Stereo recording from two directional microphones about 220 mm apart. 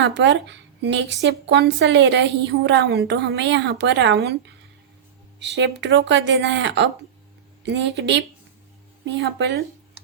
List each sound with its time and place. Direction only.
0.1 s a woman's voice: 55° right (ahead or behind)
5.4 s a woman's voice: 50° right (ahead or behind)